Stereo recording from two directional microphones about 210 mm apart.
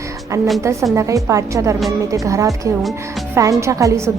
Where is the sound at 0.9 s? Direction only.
15° right (ahead or behind).